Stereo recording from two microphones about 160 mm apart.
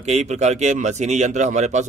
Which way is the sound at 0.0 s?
45° right (ahead or behind).